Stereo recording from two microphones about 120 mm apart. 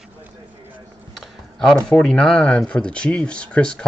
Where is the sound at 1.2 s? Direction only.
5° left (ahead or behind).